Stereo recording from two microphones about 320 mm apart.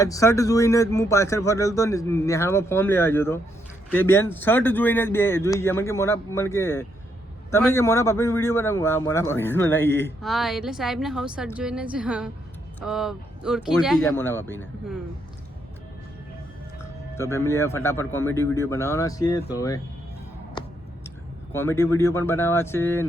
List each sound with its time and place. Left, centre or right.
0.0 s a man's voice: centre
17.2 s a man's voice: centre
21.5 s a man's voice: centre